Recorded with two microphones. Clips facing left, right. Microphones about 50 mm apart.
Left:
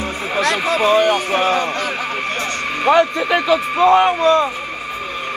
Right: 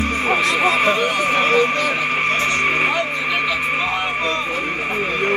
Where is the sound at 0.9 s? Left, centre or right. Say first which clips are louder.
Left 5 dB; left.